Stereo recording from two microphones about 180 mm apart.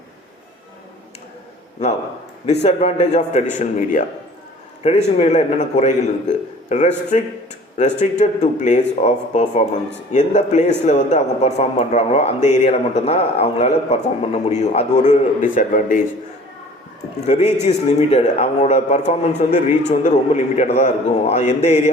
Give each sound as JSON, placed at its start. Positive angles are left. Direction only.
{"t": 2.5, "sound": "a man's voice", "side_deg": 35}
{"t": 17.2, "sound": "speech", "side_deg": 40}